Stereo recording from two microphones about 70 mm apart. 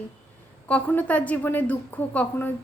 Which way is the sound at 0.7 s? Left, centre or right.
Left.